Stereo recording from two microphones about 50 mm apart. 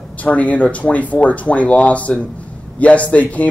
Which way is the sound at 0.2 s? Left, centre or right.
Left.